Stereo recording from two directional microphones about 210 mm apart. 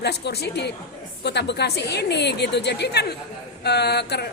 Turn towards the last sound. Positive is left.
turn(degrees=50)  # may be behind; listen again after turning